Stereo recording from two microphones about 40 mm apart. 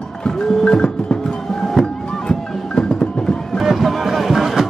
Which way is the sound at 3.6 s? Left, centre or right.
Centre.